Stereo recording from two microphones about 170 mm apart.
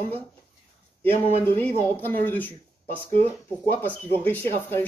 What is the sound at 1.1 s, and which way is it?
Speech, 40° left (ahead or behind).